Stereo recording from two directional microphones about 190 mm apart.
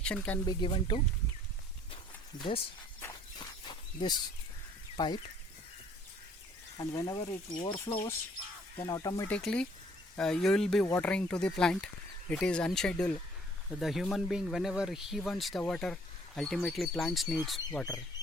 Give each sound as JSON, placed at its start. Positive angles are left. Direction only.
{"t": 0.0, "sound": "speech", "side_deg": 5}
{"t": 0.4, "sound": "speech", "side_deg": 25}
{"t": 2.3, "sound": "speech", "side_deg": 20}
{"t": 3.0, "sound": "walk", "side_deg": 20}
{"t": 4.9, "sound": "speech", "side_deg": 25}
{"t": 6.7, "sound": "speech", "side_deg": 20}
{"t": 9.3, "sound": "speech", "side_deg": 5}